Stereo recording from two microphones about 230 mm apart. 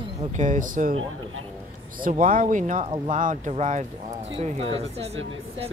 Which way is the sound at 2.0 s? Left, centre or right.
Right.